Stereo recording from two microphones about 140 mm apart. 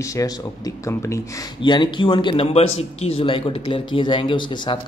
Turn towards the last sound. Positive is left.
turn(degrees=35)  # may be behind; listen again after turning